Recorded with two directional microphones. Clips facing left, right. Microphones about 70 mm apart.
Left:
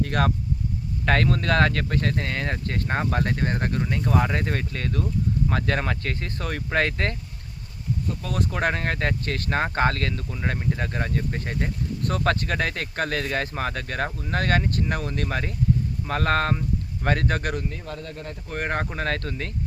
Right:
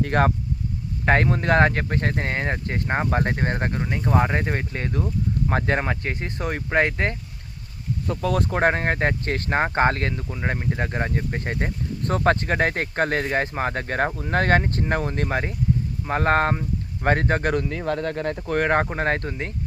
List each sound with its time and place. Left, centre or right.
0.0 s speech: right
8.0 s speech: right
17.5 s speech: right
18.8 s speech: right